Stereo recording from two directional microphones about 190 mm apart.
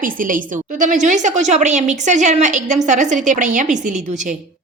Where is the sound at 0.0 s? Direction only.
45° right (ahead or behind).